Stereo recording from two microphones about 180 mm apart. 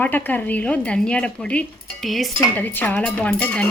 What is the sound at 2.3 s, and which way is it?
Speech, 10° left (ahead or behind).